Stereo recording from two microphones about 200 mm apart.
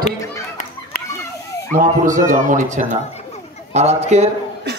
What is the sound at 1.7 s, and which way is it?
A man's voice, 40° right (ahead or behind).